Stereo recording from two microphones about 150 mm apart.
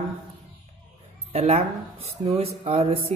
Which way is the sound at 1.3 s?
45° right (ahead or behind).